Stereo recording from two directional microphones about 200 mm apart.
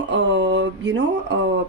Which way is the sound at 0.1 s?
60° right (ahead or behind).